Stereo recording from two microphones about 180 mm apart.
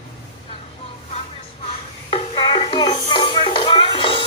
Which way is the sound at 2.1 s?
30° left (ahead or behind).